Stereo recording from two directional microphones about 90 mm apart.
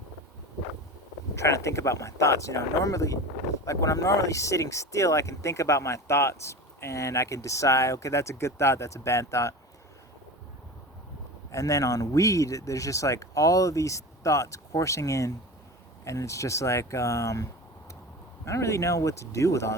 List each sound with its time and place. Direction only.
1.4 s speech: 35° left (ahead or behind)
11.5 s speech: 40° left (ahead or behind)